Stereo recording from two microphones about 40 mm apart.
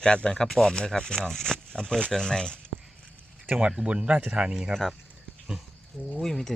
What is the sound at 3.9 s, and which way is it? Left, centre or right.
Speech, right.